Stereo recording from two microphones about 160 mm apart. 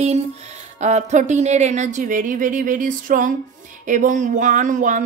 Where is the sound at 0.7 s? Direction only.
45° right (ahead or behind).